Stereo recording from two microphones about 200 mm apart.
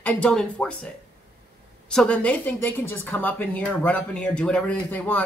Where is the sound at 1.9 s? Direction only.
5° left (ahead or behind).